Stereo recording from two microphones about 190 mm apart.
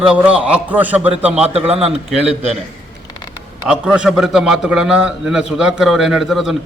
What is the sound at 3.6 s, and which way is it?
A man's voice, 5° right (ahead or behind).